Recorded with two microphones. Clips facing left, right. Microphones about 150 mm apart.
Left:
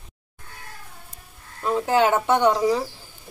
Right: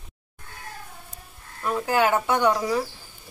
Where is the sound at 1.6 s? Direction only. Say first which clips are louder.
Left 3 dB; 25° left (ahead or behind).